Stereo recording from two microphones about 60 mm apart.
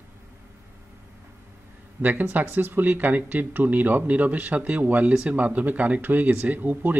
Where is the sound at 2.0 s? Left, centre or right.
Right.